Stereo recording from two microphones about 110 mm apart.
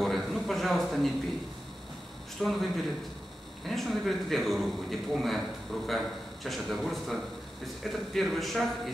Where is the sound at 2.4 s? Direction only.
5° right (ahead or behind).